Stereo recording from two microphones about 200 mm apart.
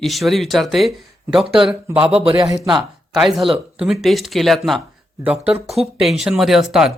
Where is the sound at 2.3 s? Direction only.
15° right (ahead or behind).